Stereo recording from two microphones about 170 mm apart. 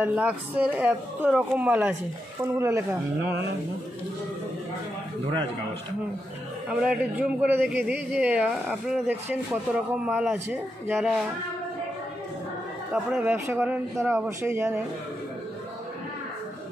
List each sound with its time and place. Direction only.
0.0 s a woman's voice: 10° right (ahead or behind)
6.7 s a woman's voice: 5° right (ahead or behind)
12.9 s a woman's voice: 10° right (ahead or behind)